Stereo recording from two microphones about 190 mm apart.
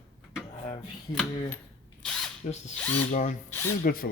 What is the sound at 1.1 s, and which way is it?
Speech, 5° left (ahead or behind).